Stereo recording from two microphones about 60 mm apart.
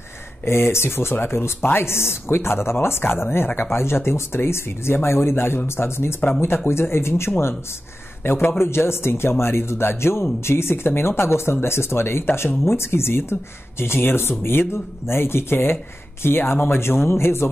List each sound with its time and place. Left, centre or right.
0.5 s speech: left